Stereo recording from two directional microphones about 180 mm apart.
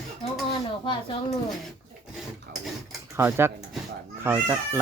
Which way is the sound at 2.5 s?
60° right (ahead or behind).